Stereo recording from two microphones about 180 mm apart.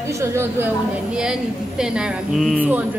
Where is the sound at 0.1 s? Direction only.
15° right (ahead or behind).